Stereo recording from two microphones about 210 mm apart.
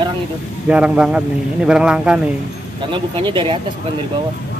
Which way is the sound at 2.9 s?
20° right (ahead or behind).